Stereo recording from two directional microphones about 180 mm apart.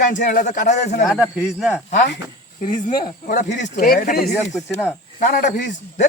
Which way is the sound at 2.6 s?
45° left (ahead or behind).